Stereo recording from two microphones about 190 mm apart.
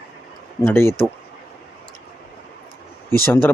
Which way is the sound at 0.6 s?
15° left (ahead or behind).